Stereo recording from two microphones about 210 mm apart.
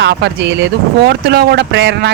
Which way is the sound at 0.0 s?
55° right (ahead or behind).